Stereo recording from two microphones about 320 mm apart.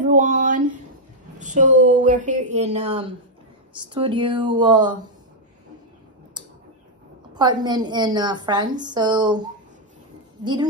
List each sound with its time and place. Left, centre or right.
0.0 s a woman's voice: right
7.3 s a woman's voice: centre